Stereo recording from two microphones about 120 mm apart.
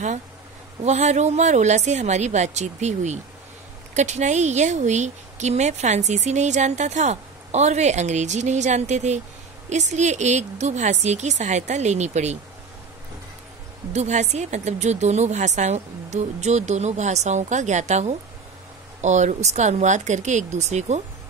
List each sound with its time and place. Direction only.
0.8 s a woman's voice: 75° right (ahead or behind)
13.9 s a woman's voice: 75° right (ahead or behind)